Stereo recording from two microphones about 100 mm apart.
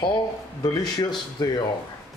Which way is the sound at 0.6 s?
40° left (ahead or behind).